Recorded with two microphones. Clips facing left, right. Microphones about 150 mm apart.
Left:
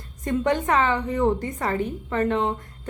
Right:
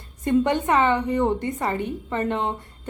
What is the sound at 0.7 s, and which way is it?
A woman's voice, centre (ahead or behind).